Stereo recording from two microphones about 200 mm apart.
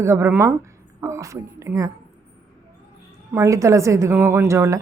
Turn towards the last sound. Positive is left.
turn(degrees=-15)  # may be behind; listen again after turning